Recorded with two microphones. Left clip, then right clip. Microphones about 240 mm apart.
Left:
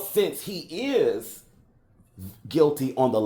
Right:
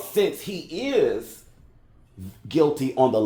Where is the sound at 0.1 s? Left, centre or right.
Left.